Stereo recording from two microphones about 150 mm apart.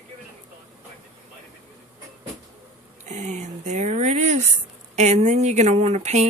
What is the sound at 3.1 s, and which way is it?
Speech, 50° right (ahead or behind).